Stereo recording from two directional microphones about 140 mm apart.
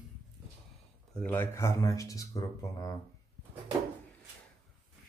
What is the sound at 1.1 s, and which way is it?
A man's voice, 15° left (ahead or behind).